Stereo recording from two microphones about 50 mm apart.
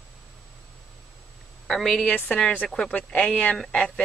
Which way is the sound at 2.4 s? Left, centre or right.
Left.